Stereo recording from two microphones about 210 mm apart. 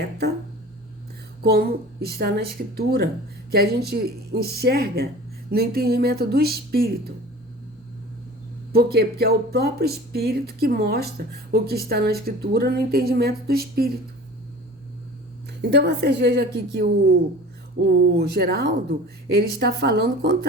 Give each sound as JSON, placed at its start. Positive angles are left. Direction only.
{"t": 1.4, "sound": "speech", "side_deg": -45}
{"t": 8.7, "sound": "speech", "side_deg": -50}
{"t": 15.7, "sound": "speech", "side_deg": -55}
{"t": 18.2, "sound": "speech", "side_deg": -50}